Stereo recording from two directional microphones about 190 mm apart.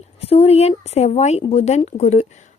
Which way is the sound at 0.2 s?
30° left (ahead or behind).